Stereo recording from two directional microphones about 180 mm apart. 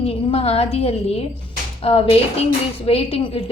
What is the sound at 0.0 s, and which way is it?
A woman's voice, 30° left (ahead or behind).